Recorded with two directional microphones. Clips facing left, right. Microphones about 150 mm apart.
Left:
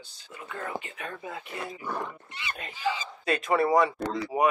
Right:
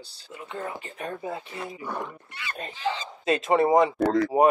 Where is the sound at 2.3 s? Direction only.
20° left (ahead or behind).